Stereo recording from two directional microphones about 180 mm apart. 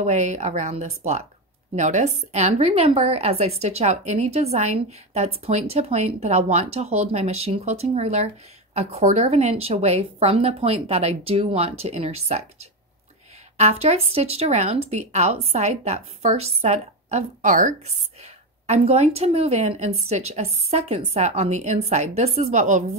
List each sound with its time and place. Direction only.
0.0 s a woman's voice: 40° right (ahead or behind)
13.6 s a woman's voice: 35° right (ahead or behind)